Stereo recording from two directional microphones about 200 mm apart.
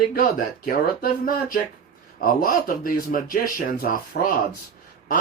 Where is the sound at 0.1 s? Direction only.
45° left (ahead or behind).